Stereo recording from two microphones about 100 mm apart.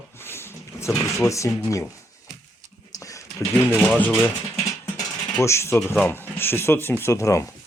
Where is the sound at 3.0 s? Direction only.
30° left (ahead or behind).